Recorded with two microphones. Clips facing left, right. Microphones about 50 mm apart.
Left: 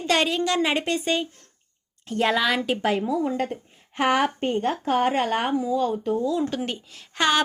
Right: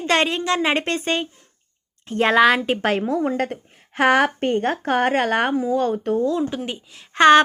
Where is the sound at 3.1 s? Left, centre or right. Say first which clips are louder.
Right 3 dB; right.